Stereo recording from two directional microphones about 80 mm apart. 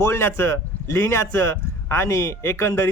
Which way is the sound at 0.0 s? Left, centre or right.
Left.